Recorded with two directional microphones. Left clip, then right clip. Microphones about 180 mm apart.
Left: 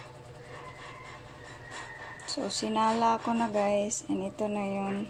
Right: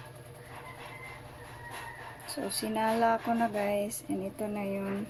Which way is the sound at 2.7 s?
15° left (ahead or behind).